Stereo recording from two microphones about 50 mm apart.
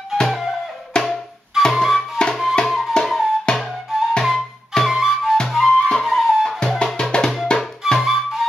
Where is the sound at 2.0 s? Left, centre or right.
Centre.